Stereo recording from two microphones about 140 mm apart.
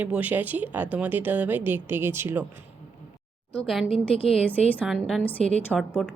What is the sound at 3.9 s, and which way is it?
Speech, 45° left (ahead or behind).